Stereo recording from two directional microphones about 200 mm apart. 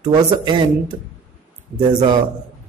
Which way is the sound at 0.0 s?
20° right (ahead or behind).